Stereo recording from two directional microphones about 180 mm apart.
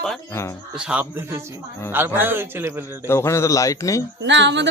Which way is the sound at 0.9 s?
10° right (ahead or behind).